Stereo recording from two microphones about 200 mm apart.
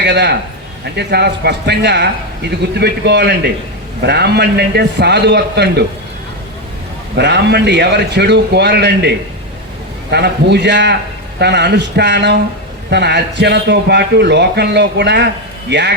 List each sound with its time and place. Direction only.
0.0 s a man's voice: 60° right (ahead or behind)
7.2 s a man's voice: 60° right (ahead or behind)